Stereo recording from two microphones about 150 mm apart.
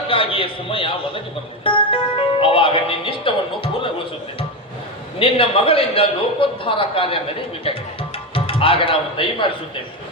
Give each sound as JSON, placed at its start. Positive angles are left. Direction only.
{"t": 0.1, "sound": "a man's voice", "side_deg": 35}
{"t": 1.6, "sound": "music", "side_deg": 35}
{"t": 5.2, "sound": "a man's voice", "side_deg": 40}
{"t": 8.3, "sound": "speech", "side_deg": 35}